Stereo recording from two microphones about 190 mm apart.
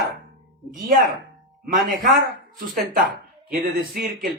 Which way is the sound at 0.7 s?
45° right (ahead or behind).